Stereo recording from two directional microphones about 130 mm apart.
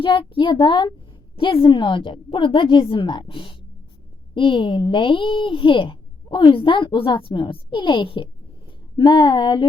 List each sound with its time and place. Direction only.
0.0 s speech: 40° left (ahead or behind)